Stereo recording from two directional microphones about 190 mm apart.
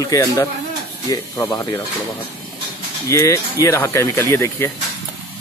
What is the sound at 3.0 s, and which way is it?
Speech, 15° left (ahead or behind).